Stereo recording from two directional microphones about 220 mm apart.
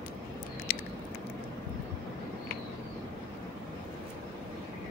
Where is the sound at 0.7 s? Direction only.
45° left (ahead or behind).